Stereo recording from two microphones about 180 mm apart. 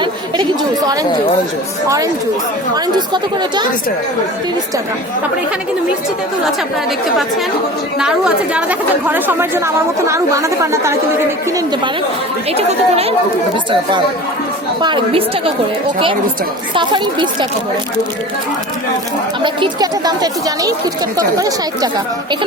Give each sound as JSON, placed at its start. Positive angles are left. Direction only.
{"t": 0.0, "sound": "chatter", "side_deg": -20}
{"t": 2.7, "sound": "speech", "side_deg": -25}
{"t": 7.9, "sound": "a woman's voice", "side_deg": -5}
{"t": 12.5, "sound": "speech", "side_deg": -35}
{"t": 14.8, "sound": "speech", "side_deg": -25}
{"t": 16.7, "sound": "speech", "side_deg": -25}
{"t": 19.4, "sound": "speech", "side_deg": -25}